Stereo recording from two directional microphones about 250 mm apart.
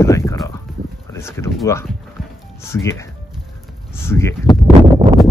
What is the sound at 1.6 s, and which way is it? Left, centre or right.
Speech, centre.